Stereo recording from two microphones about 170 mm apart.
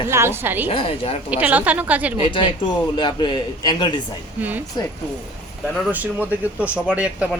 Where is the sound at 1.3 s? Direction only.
10° right (ahead or behind).